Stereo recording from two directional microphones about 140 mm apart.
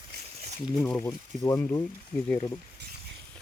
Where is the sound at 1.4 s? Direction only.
20° left (ahead or behind).